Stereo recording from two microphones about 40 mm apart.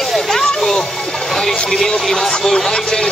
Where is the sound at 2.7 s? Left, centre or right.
Centre.